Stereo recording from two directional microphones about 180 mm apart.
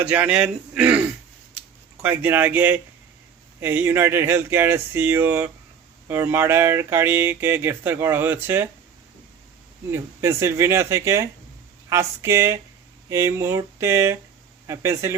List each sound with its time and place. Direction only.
0.0 s speech: 10° right (ahead or behind)
9.9 s speech: 15° right (ahead or behind)